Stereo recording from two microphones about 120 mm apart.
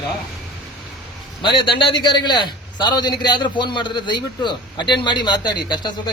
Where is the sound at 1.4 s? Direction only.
40° left (ahead or behind).